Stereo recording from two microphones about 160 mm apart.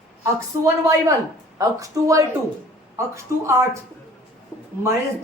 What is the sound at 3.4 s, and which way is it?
Speech, 15° right (ahead or behind).